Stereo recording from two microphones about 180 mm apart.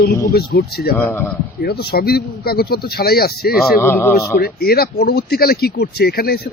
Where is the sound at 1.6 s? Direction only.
60° left (ahead or behind).